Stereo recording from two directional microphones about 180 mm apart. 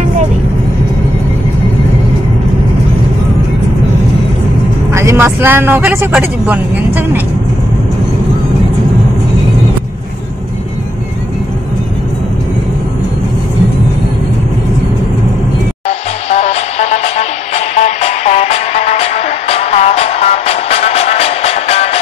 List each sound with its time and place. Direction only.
4.9 s speech: 15° right (ahead or behind)
16.3 s music: 35° left (ahead or behind)